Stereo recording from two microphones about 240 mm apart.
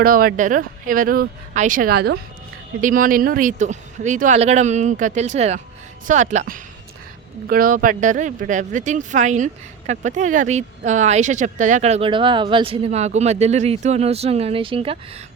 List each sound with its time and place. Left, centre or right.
0.0 s speech: right